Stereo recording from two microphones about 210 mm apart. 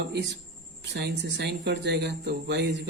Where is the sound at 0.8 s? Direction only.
55° right (ahead or behind).